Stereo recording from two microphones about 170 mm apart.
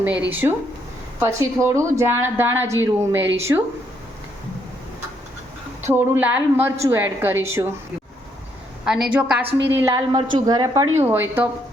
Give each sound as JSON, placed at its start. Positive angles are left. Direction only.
{"t": 0.0, "sound": "a woman's voice", "side_deg": -10}
{"t": 5.9, "sound": "a woman's voice", "side_deg": -10}
{"t": 8.8, "sound": "a woman's voice", "side_deg": -5}
{"t": 9.7, "sound": "a woman's voice", "side_deg": -20}
{"t": 11.0, "sound": "a woman's voice", "side_deg": -10}